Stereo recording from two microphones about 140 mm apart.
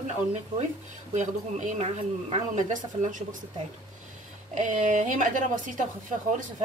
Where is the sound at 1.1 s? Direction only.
60° right (ahead or behind).